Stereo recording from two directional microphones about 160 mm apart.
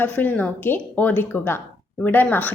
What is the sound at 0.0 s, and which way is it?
A woman's voice, 10° left (ahead or behind).